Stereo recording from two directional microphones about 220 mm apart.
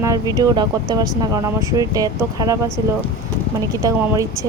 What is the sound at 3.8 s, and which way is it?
Speech, 15° right (ahead or behind).